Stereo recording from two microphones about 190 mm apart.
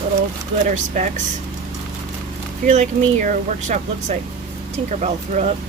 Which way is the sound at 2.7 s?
40° right (ahead or behind).